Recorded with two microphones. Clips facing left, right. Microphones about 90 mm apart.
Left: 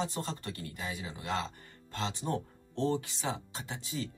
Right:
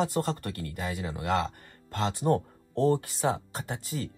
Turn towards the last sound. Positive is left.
turn(degrees=-45)  # may be behind; listen again after turning